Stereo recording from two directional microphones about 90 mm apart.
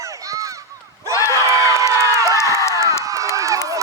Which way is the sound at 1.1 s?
35° left (ahead or behind).